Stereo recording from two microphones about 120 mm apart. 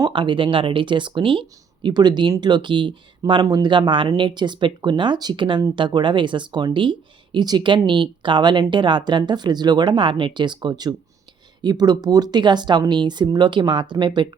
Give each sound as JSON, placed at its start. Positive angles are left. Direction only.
{"t": 0.0, "sound": "speech", "side_deg": -40}